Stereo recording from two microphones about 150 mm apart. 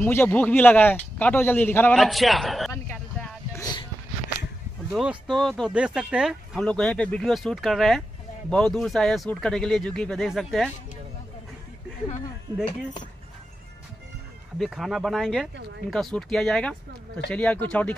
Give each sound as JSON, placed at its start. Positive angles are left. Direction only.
{"t": 0.0, "sound": "speech", "side_deg": 15}
{"t": 2.0, "sound": "speech", "side_deg": 0}
{"t": 3.5, "sound": "a sound", "side_deg": 25}
{"t": 4.9, "sound": "speech", "side_deg": -10}
{"t": 14.6, "sound": "speech", "side_deg": 0}